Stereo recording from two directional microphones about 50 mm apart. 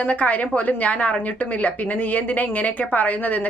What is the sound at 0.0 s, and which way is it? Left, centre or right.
A woman's voice, left.